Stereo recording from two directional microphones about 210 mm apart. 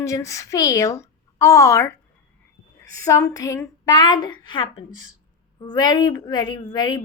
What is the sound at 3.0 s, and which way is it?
A woman's voice, 15° left (ahead or behind).